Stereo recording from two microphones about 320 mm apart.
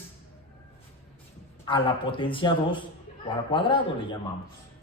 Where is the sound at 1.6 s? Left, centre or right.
Centre.